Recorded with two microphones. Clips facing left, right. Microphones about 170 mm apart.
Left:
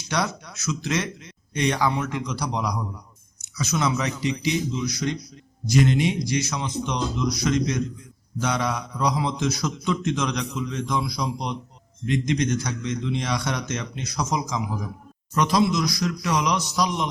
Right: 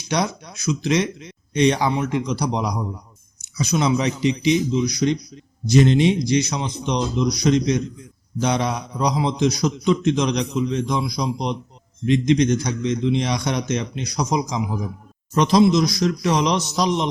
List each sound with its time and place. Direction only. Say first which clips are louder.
0.1 s a man's voice: right 4 dB; 15° right (ahead or behind)